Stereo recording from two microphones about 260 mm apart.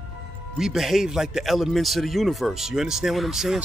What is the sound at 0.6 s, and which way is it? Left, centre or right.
Speech, centre.